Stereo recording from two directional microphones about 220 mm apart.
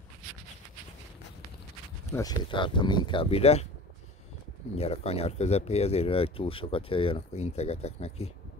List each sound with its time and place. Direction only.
2.1 s speech: 20° left (ahead or behind)
4.7 s speech: 25° left (ahead or behind)